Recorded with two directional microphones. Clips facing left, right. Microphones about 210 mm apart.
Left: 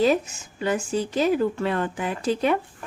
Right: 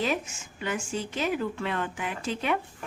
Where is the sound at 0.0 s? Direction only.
35° left (ahead or behind).